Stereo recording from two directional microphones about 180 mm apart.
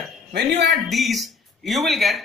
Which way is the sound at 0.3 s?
70° right (ahead or behind).